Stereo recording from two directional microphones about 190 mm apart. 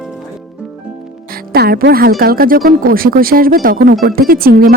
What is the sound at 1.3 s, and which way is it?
Speech, 55° right (ahead or behind).